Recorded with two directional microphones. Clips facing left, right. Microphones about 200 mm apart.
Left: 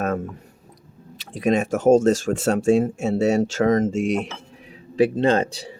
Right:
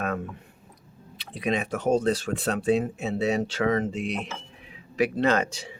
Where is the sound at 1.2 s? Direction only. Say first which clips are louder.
Left 7 dB; 45° left (ahead or behind).